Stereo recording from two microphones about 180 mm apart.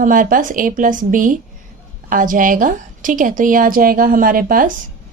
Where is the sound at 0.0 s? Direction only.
50° right (ahead or behind).